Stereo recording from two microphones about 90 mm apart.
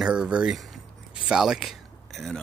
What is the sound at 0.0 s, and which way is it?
Speech, 10° right (ahead or behind).